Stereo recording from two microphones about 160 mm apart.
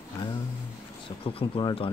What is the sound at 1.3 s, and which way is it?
Speech, 35° left (ahead or behind).